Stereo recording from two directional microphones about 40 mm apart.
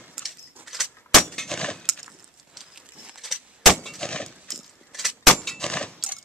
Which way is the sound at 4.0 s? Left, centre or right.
Left.